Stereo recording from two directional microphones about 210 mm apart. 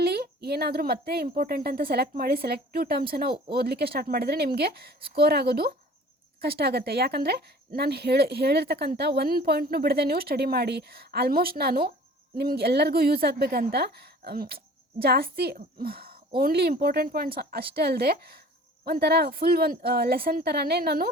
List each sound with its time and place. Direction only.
0.0 s a child's voice: 50° right (ahead or behind)